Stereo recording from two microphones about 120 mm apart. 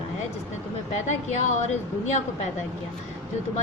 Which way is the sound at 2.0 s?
75° left (ahead or behind).